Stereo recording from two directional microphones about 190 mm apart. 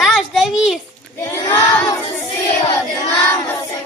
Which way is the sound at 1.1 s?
15° left (ahead or behind).